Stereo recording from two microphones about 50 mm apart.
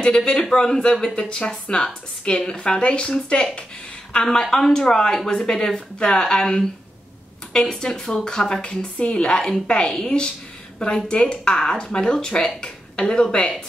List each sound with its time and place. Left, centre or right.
0.0 s a woman's voice: centre